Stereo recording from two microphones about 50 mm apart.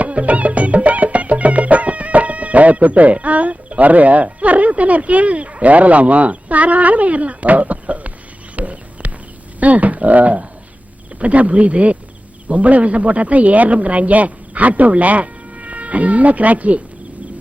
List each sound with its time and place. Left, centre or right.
0.0 s music: right
8.5 s a sound: right
9.6 s speech: right